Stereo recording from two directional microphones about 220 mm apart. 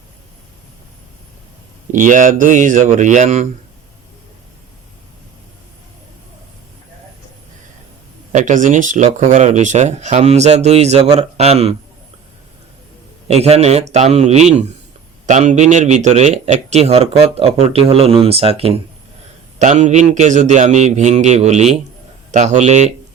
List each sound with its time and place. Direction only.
1.9 s speech: 35° right (ahead or behind)
8.3 s speech: 35° right (ahead or behind)
13.2 s a man's voice: 30° right (ahead or behind)